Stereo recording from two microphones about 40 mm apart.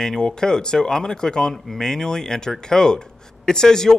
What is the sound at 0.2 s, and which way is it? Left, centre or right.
Speech, centre.